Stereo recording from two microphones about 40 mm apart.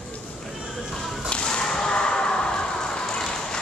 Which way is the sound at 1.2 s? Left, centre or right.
Left.